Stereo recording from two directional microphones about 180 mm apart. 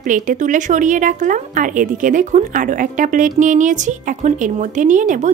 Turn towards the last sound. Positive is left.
turn(degrees=-45)  # may be behind; listen again after turning